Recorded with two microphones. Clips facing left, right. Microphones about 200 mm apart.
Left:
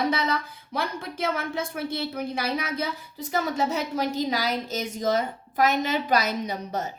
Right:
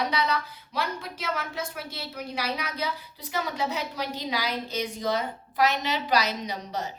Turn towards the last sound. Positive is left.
turn(degrees=50)  # may be behind; listen again after turning